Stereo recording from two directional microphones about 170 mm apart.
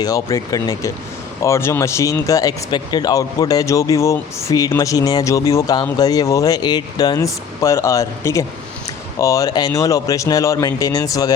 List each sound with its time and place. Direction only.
0.0 s speech: 20° left (ahead or behind)